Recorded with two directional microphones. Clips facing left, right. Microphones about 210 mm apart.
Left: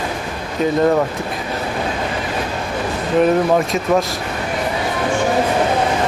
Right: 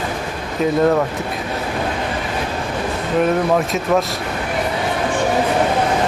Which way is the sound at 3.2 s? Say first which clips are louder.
Left 2 dB; centre (ahead or behind).